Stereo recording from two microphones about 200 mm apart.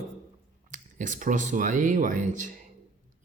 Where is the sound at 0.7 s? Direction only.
40° right (ahead or behind).